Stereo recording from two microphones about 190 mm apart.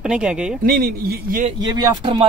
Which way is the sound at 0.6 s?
50° right (ahead or behind).